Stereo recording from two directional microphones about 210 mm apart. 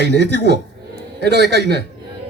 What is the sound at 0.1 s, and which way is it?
A man's voice, 50° right (ahead or behind).